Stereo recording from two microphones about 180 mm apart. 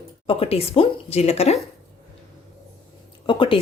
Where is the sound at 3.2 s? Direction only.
30° left (ahead or behind).